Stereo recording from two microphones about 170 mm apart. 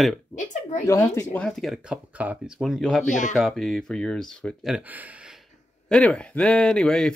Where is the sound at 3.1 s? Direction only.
45° left (ahead or behind).